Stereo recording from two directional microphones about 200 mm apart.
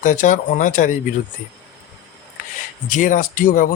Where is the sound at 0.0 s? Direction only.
40° left (ahead or behind).